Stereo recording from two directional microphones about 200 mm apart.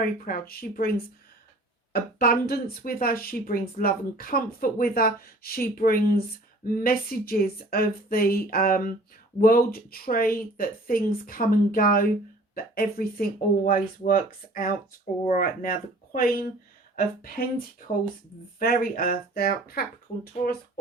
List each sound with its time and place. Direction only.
0.3 s speech: 50° left (ahead or behind)